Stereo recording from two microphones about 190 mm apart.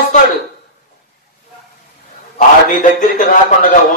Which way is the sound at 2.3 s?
40° left (ahead or behind).